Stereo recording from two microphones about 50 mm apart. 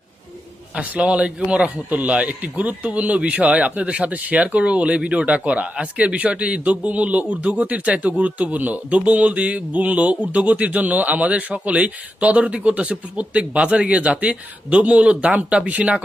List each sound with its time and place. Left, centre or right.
0.8 s a man's voice: right